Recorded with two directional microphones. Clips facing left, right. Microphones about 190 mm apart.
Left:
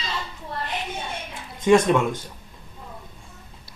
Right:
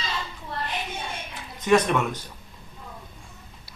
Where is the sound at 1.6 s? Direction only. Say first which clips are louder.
Left 3 dB; 25° left (ahead or behind).